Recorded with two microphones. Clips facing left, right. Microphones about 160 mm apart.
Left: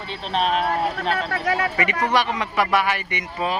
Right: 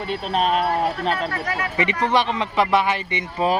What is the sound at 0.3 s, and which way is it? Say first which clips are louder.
Speech: right 1 dB; 40° right (ahead or behind).